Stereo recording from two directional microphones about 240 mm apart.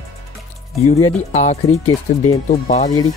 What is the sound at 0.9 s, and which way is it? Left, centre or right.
Speech, left.